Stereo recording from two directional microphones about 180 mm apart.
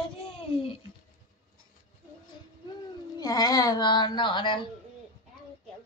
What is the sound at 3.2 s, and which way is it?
A woman's voice, 20° left (ahead or behind).